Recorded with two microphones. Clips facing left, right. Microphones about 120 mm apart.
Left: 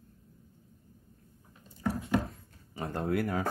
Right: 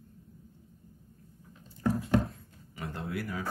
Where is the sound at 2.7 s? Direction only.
40° left (ahead or behind).